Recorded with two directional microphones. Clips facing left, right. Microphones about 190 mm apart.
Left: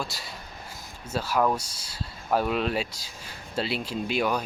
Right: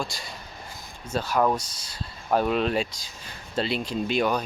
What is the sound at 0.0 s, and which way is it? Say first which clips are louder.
Speech: right 2 dB; 5° left (ahead or behind).